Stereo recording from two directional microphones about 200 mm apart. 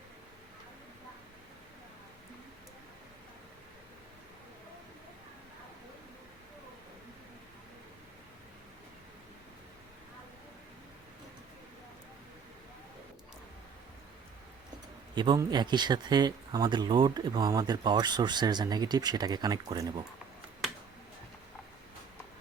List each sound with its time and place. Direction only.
15.1 s speech: 20° right (ahead or behind)